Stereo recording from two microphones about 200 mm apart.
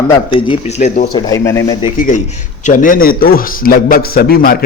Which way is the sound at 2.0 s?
40° left (ahead or behind).